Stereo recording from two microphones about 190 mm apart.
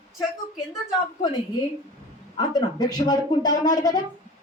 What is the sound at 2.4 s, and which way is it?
A woman's voice, 20° left (ahead or behind).